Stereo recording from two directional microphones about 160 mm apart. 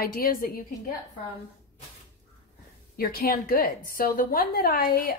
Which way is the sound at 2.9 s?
70° left (ahead or behind).